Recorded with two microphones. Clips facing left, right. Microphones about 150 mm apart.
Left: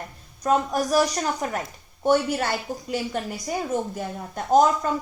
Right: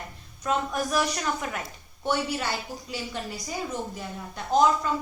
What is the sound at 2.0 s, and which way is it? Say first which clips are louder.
A woman's voice: left 6 dB; 50° left (ahead or behind).